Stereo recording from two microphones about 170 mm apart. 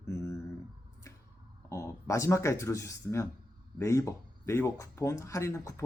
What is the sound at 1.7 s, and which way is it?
Speech, 15° left (ahead or behind).